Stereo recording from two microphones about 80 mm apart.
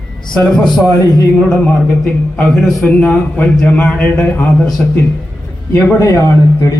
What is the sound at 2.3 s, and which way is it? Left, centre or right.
A man's voice, centre.